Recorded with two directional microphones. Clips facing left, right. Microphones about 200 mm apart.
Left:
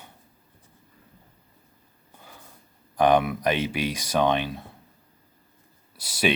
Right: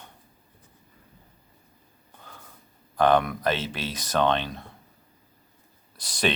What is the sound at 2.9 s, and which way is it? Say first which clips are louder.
Speech: left 1 dB; 15° left (ahead or behind).